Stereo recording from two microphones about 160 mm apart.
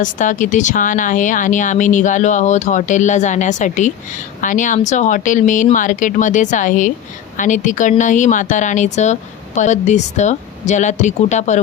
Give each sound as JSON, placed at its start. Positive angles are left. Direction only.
{"t": 0.0, "sound": "speech", "side_deg": 50}